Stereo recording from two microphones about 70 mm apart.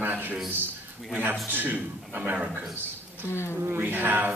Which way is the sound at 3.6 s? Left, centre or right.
Right.